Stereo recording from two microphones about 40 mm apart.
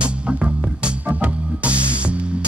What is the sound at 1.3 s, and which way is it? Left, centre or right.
Music, right.